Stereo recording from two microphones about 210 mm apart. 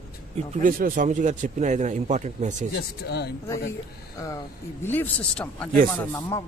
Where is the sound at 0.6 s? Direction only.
40° right (ahead or behind).